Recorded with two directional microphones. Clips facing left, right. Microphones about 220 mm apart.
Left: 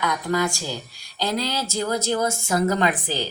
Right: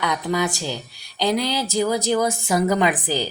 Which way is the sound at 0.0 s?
20° right (ahead or behind).